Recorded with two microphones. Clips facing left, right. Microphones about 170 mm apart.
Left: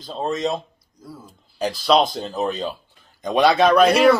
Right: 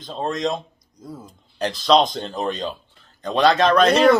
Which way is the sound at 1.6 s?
5° left (ahead or behind).